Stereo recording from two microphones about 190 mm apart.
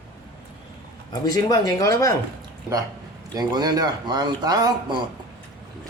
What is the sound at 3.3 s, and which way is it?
Speech, 20° right (ahead or behind).